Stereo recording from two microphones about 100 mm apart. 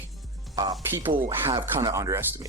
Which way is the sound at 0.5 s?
40° right (ahead or behind).